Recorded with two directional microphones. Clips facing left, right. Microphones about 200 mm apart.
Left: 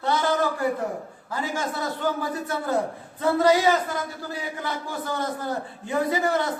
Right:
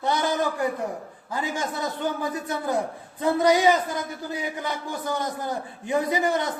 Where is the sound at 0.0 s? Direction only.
15° right (ahead or behind).